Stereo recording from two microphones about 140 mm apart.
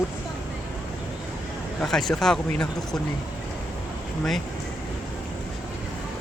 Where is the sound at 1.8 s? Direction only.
Centre (ahead or behind).